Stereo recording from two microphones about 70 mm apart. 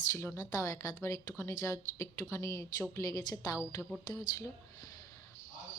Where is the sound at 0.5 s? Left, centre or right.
Left.